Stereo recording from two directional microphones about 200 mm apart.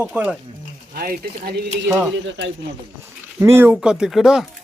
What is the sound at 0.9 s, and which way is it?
Speech, 50° right (ahead or behind).